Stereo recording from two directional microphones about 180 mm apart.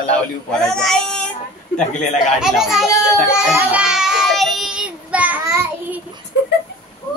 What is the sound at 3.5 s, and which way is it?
Child singing, 5° right (ahead or behind).